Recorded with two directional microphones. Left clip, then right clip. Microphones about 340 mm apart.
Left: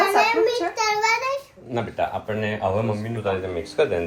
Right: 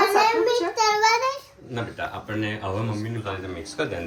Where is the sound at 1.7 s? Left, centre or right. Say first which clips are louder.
Left 6 dB; centre.